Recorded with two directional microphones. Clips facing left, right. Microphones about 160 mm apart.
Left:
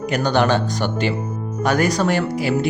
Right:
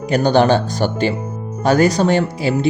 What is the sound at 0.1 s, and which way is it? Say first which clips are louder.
Speech: right 5 dB; 30° right (ahead or behind).